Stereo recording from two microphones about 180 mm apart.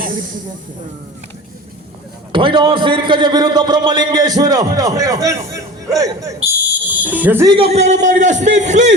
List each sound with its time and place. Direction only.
2.3 s a man's voice: 25° right (ahead or behind); by 7.4 s 10° right (ahead or behind)
7.4 s a man's voice: 30° right (ahead or behind)